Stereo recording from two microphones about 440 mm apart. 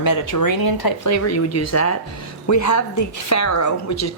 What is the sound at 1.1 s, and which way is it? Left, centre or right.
Speech, left.